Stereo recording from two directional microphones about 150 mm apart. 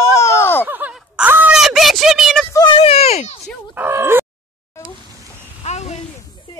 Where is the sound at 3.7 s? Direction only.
15° right (ahead or behind).